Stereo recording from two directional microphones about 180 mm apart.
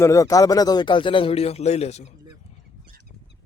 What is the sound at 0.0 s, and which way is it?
Speech, 20° left (ahead or behind).